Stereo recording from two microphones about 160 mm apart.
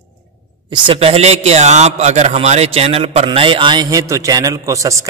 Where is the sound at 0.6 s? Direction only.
30° right (ahead or behind).